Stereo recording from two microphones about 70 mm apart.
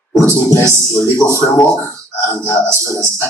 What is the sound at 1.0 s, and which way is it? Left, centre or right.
Speech, left.